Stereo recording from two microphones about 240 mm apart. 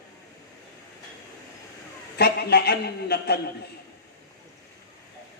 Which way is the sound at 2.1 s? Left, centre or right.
Left.